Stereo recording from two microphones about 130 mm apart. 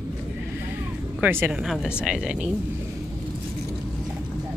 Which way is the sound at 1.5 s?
5° right (ahead or behind).